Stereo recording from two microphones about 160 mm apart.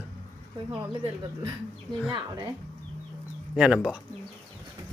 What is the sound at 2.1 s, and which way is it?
Speech, 30° right (ahead or behind).